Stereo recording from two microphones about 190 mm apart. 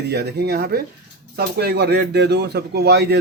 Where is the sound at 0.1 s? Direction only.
60° right (ahead or behind).